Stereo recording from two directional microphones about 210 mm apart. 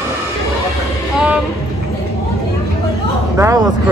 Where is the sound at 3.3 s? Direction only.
15° right (ahead or behind).